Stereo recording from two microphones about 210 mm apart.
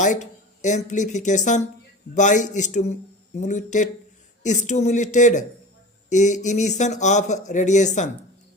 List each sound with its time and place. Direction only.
0.0 s speech: 35° left (ahead or behind)